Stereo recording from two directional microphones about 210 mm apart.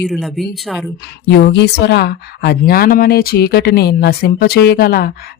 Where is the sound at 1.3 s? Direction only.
55° left (ahead or behind).